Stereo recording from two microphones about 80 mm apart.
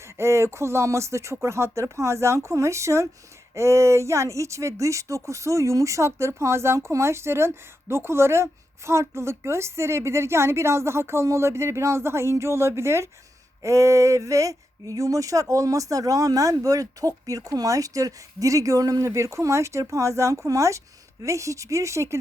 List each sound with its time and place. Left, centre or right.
0.0 s speech: right